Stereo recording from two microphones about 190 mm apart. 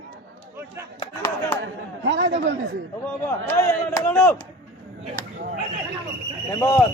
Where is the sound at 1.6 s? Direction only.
65° right (ahead or behind).